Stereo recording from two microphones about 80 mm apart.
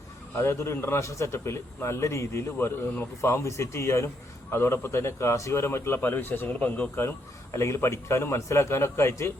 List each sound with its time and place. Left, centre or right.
0.3 s a man's voice: left
3.2 s a man's voice: left
7.5 s a man's voice: left